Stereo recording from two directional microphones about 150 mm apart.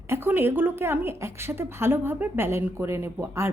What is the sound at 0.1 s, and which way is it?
A woman's voice, 15° right (ahead or behind).